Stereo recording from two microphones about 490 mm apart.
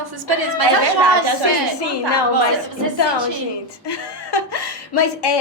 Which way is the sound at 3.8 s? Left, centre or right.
Left.